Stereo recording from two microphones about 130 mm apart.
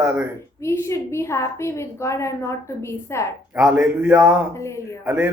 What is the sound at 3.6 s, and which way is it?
Speech, 5° right (ahead or behind).